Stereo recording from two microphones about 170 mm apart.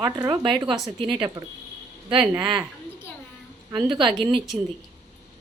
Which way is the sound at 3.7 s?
30° right (ahead or behind).